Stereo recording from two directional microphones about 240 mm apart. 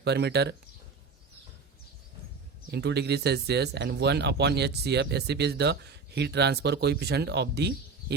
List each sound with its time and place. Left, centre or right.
0.0 s speech: right
2.6 s speech: right